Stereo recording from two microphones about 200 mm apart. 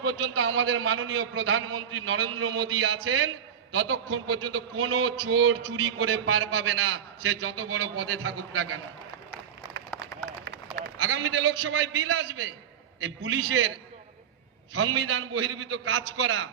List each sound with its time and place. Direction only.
0.3 s a man's voice: 75° right (ahead or behind)
11.0 s a man's voice: 70° right (ahead or behind)
13.0 s a man's voice: 80° right
14.9 s a man's voice: 75° right (ahead or behind)